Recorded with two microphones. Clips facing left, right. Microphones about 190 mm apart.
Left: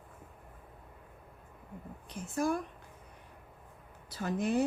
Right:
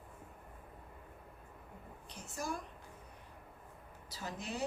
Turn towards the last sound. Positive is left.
turn(degrees=55)  # may be behind; listen again after turning